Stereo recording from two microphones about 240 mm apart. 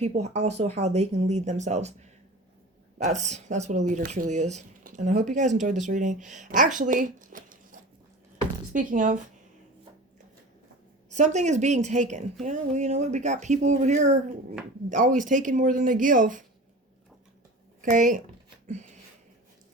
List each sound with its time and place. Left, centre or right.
0.0 s a woman's voice: right
3.0 s a woman's voice: right
6.7 s a sound: right
8.7 s speech: right
11.1 s a woman's voice: right
17.9 s speech: right
18.6 s a sound: right